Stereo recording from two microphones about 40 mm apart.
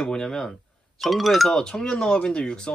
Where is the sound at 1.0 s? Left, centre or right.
Centre.